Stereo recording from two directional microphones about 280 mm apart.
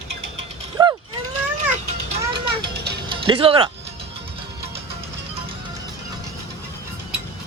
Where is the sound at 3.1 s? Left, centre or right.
Centre.